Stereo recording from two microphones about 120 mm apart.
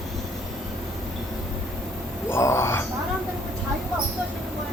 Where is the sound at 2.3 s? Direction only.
20° left (ahead or behind).